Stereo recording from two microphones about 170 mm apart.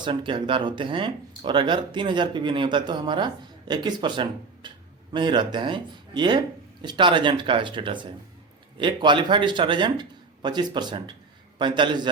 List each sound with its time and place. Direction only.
0.0 s speech: 30° right (ahead or behind)